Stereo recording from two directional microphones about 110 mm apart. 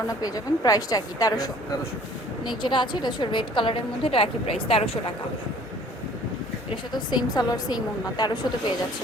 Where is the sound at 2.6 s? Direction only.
45° left (ahead or behind).